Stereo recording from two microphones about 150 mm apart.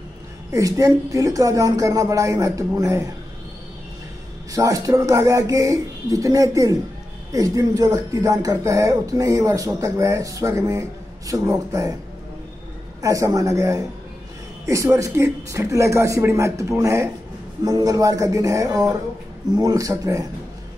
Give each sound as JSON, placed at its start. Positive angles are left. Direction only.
{"t": 0.5, "sound": "speech", "side_deg": -20}
{"t": 4.5, "sound": "speech", "side_deg": -20}
{"t": 13.0, "sound": "speech", "side_deg": -20}